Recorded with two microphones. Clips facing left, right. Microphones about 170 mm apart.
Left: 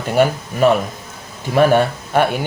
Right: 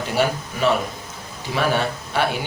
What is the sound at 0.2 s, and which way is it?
Speech, 50° left (ahead or behind).